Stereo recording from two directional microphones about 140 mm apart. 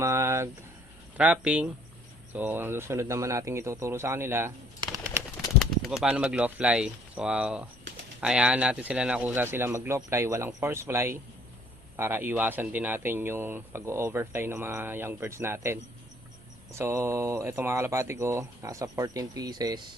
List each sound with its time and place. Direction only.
0.0 s a sound: 20° right (ahead or behind)
1.1 s speech: 10° right (ahead or behind)
5.5 s speech: centre (ahead or behind); by 19.9 s 30° right (ahead or behind)